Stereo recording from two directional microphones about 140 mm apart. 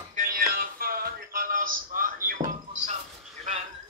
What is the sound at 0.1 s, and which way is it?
Music, 85° right.